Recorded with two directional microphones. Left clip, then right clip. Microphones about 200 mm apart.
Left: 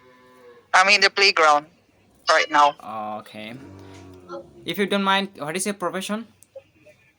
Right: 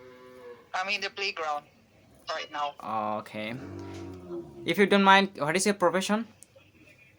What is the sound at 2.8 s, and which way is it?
Speech, 5° right (ahead or behind).